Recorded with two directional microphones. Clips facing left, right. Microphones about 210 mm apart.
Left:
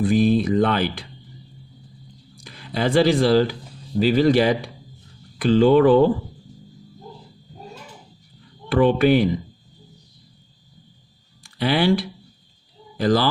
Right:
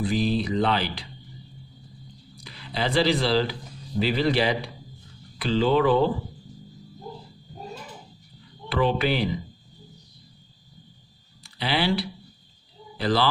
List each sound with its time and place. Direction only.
0.0 s speech: 50° left (ahead or behind)
2.3 s speech: 50° left (ahead or behind)
8.7 s speech: 50° left (ahead or behind)
11.4 s speech: 50° left (ahead or behind)